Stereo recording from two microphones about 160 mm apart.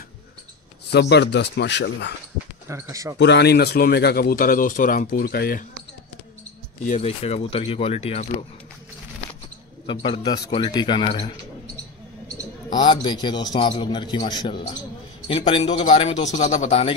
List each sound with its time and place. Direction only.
0.9 s speech: 90° left
2.7 s speech: 20° right (ahead or behind)
3.2 s speech: 90° left; by 5.7 s 70° left (ahead or behind)
6.8 s speech: 45° left (ahead or behind)
9.8 s a man's voice: 30° left (ahead or behind)
12.7 s a man's voice: 30° left (ahead or behind); by 16.9 s 45° left (ahead or behind)